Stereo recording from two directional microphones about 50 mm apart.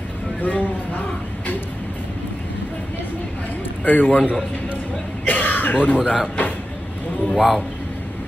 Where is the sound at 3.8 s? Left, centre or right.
Left.